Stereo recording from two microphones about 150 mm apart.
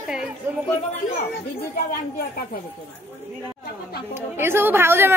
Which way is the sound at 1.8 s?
75° left (ahead or behind).